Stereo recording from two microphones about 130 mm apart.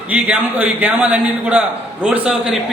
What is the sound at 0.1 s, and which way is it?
A man's voice, 15° right (ahead or behind).